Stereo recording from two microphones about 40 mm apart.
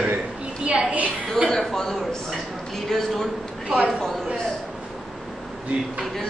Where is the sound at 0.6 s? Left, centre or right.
Right.